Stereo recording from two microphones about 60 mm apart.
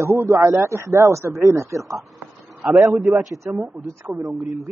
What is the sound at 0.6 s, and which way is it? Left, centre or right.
Speech, right.